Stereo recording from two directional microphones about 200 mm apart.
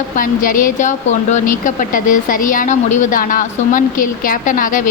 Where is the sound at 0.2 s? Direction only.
45° left (ahead or behind).